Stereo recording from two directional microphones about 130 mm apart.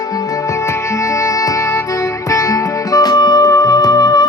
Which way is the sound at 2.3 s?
25° left (ahead or behind).